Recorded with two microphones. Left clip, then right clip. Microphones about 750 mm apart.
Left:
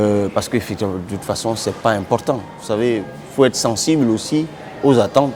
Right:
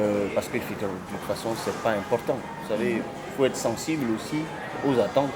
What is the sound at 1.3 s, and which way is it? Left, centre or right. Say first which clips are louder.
Speech: left 8 dB; left.